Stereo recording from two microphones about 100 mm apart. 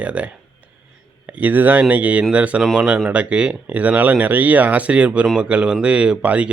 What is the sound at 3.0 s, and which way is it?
Speech, 15° right (ahead or behind).